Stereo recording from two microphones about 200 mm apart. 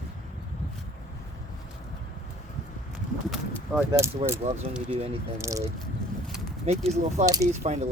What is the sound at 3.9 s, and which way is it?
Speech, 15° right (ahead or behind).